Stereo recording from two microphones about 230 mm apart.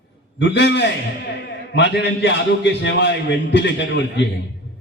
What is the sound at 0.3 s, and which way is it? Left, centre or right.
A man's voice, left.